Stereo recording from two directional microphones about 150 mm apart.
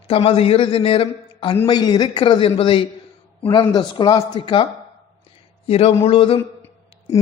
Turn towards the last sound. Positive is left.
turn(degrees=20)  # may be behind; listen again after turning